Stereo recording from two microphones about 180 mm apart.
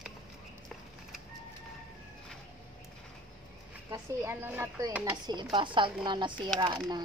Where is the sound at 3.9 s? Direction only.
15° right (ahead or behind).